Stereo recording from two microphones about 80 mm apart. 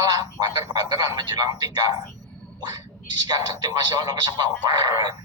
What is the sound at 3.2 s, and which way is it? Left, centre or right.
Speech, right.